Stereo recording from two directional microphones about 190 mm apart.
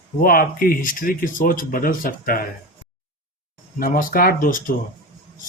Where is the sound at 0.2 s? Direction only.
50° left (ahead or behind).